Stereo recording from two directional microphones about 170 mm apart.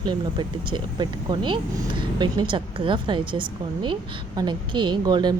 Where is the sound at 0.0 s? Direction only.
25° right (ahead or behind).